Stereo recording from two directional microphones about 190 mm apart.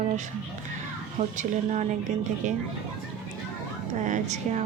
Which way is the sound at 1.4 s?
40° right (ahead or behind).